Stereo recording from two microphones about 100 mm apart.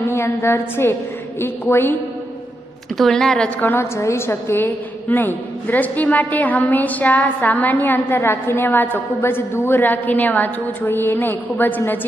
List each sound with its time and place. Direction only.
0.1 s a woman's voice: 25° left (ahead or behind)
3.0 s a woman's voice: 5° left (ahead or behind)
3.6 s a woman's voice: 25° left (ahead or behind)